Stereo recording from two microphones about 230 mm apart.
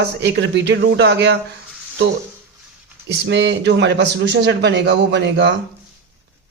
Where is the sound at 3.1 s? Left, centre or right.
Right.